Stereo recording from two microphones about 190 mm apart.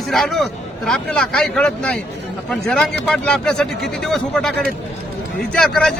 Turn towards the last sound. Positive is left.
turn(degrees=5)  # may be behind; listen again after turning